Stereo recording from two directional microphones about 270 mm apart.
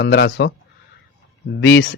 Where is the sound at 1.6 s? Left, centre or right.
Left.